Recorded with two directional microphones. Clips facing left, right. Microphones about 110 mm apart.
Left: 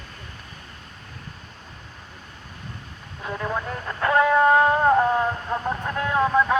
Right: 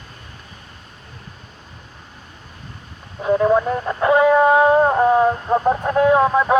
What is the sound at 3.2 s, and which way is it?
Speech, 30° right (ahead or behind).